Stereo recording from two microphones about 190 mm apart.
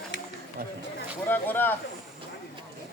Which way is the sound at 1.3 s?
10° left (ahead or behind).